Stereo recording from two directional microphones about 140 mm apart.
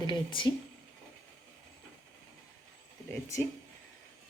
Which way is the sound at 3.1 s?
20° left (ahead or behind).